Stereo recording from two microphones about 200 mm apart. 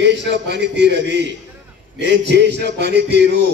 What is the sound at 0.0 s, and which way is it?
A man's voice, 60° right (ahead or behind).